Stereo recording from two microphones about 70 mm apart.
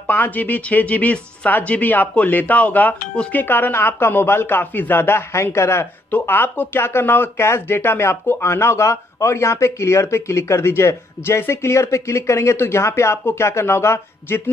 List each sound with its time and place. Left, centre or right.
0.0 s speech: left